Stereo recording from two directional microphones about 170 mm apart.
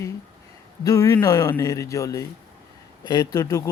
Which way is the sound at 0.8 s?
20° left (ahead or behind).